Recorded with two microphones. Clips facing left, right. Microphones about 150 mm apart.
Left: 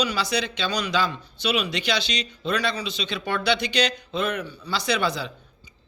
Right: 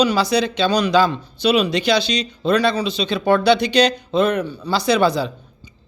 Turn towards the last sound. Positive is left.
turn(degrees=-35)  # may be behind; listen again after turning